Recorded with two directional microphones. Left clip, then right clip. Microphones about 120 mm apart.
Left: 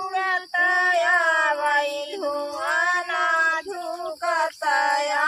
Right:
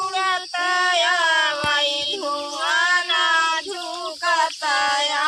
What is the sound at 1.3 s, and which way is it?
Child singing, 15° right (ahead or behind).